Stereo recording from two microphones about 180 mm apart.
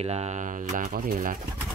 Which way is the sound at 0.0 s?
35° right (ahead or behind).